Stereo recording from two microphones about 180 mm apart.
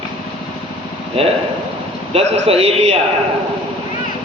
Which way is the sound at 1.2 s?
30° right (ahead or behind).